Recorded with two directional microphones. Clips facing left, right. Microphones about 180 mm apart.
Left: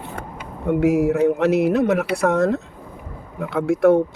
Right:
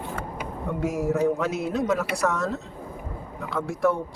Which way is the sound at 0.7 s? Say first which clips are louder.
Left 9 dB; 65° left (ahead or behind).